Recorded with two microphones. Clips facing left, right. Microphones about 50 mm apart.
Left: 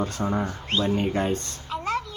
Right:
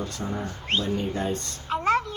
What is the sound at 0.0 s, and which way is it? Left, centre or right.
Speech, left.